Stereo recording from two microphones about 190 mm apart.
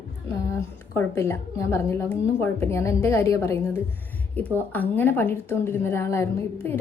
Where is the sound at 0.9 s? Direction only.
15° left (ahead or behind).